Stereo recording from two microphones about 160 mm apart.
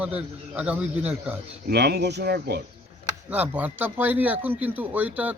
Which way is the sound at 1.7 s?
90° right.